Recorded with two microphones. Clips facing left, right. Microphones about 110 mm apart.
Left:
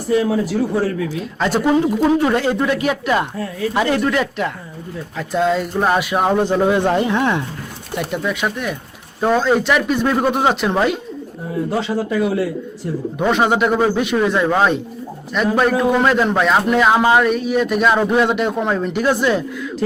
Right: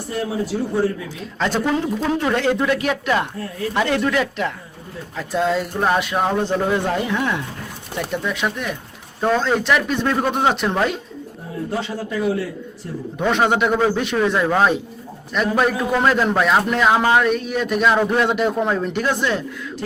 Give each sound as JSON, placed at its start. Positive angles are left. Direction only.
{"t": 1.4, "sound": "a man's voice", "side_deg": 10}
{"t": 7.9, "sound": "a man's voice", "side_deg": 5}
{"t": 11.8, "sound": "a man's voice", "side_deg": 90}
{"t": 13.1, "sound": "a man's voice", "side_deg": 5}